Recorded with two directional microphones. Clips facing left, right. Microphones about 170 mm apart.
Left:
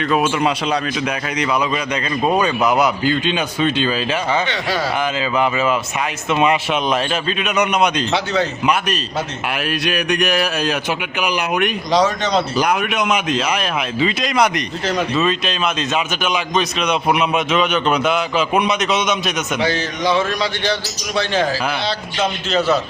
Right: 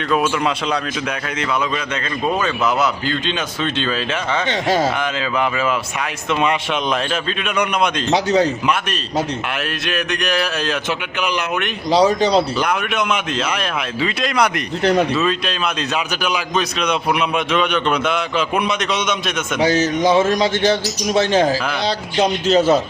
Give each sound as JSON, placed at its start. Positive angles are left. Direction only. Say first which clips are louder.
{"t": 0.1, "sound": "speech", "louder": "even", "side_deg": 5}
{"t": 2.3, "sound": "speech", "louder": "left 3 dB", "side_deg": 15}
{"t": 4.4, "sound": "a man's voice", "louder": "right 4 dB", "side_deg": -45}
{"t": 4.9, "sound": "a man's voice", "louder": "left 2 dB", "side_deg": 5}
{"t": 8.1, "sound": "speech", "louder": "right 3 dB", "side_deg": -40}
{"t": 9.8, "sound": "speech", "louder": "left 4 dB", "side_deg": 15}
{"t": 11.9, "sound": "speech", "louder": "right 5 dB", "side_deg": -30}
{"t": 12.5, "sound": "a man's voice", "louder": "left 2 dB", "side_deg": 5}
{"t": 19.5, "sound": "a man's voice", "louder": "right 8 dB", "side_deg": -45}